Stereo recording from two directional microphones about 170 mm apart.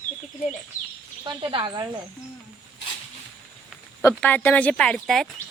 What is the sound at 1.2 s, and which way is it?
Speech, 25° right (ahead or behind).